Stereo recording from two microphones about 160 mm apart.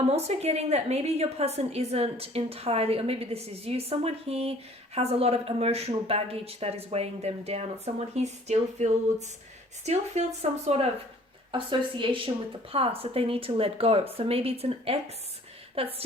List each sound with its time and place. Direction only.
0.1 s a woman's voice: 40° right (ahead or behind)
11.5 s a woman's voice: 30° right (ahead or behind)